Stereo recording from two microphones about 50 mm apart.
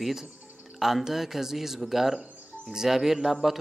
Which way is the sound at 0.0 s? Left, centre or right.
Centre.